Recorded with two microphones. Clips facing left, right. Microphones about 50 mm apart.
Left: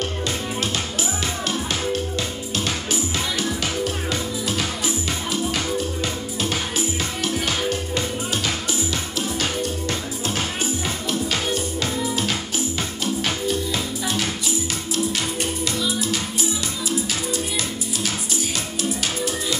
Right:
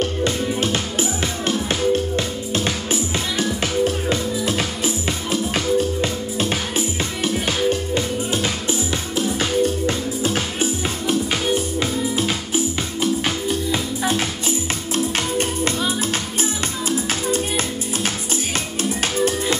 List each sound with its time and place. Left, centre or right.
0.2 s music: right
7.3 s music: right
15.1 s music: right
18.8 s music: right